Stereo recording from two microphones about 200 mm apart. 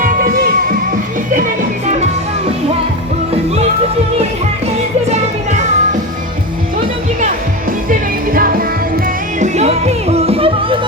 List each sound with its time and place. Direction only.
0.0 s music: 45° right (ahead or behind)
7.9 s music: 45° right (ahead or behind)
9.4 s music: 35° right (ahead or behind)